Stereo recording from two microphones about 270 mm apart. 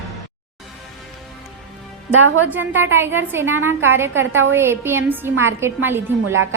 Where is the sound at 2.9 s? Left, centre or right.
Centre.